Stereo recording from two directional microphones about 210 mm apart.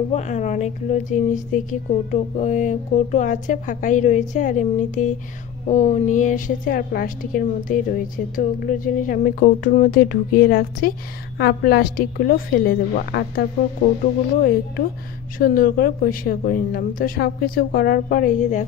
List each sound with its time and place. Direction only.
0.1 s a woman's voice: 35° left (ahead or behind)
15.3 s a woman's voice: 40° left (ahead or behind)